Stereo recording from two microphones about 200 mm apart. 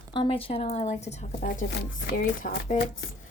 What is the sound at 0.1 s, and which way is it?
Speech, 25° left (ahead or behind).